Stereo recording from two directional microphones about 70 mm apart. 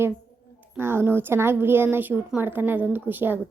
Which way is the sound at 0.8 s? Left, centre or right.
Right.